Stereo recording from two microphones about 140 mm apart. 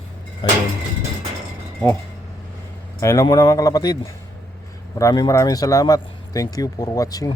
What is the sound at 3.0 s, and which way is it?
A man's voice, 20° left (ahead or behind).